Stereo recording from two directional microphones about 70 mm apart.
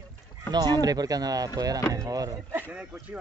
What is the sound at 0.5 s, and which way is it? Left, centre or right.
Speech, right.